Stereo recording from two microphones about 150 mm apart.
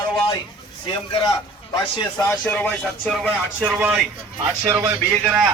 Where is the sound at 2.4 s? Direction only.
10° left (ahead or behind).